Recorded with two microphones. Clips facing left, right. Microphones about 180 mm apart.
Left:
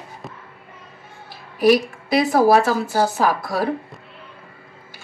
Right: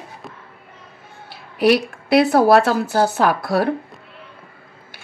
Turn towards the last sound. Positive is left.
turn(degrees=-65)  # may be behind; listen again after turning